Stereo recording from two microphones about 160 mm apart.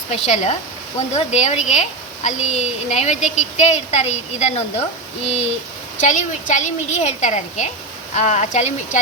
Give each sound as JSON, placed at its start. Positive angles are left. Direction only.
{"t": 0.1, "sound": "a woman's voice", "side_deg": 45}